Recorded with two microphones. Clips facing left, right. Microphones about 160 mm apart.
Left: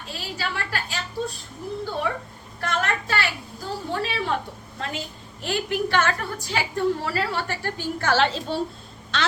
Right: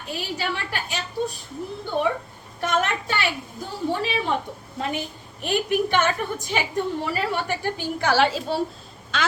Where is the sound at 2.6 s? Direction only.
20° right (ahead or behind).